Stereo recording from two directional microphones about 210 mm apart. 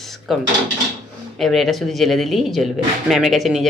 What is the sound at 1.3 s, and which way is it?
Speech, centre (ahead or behind).